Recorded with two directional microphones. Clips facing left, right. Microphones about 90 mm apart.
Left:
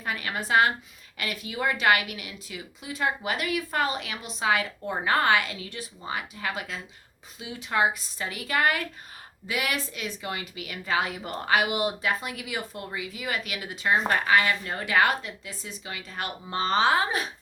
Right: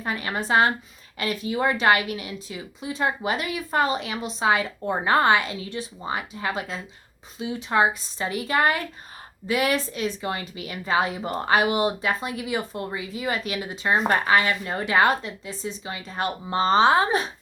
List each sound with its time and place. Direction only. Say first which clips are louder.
0.0 s a woman's voice: right 3 dB; 30° right (ahead or behind)